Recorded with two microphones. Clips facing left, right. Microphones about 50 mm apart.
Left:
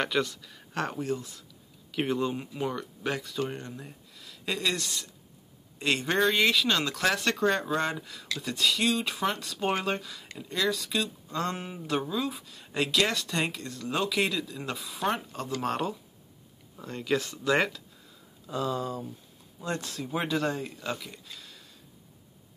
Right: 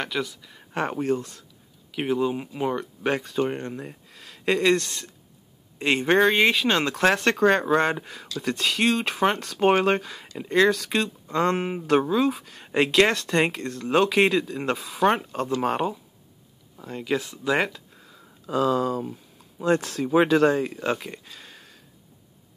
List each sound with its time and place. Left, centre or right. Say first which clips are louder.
0.0 s speech: left 1 dB; centre
0.8 s speech: right 8 dB; right
1.9 s speech: right 4 dB; centre; by 5.1 s right
5.8 s speech: right 6 dB; right
11.5 s speech: right 10 dB; right
15.6 s speech: right 4 dB; right
16.7 s speech: right 2 dB; centre
18.0 s a sound: right 7 dB; right
19.6 s speech: right 11 dB; right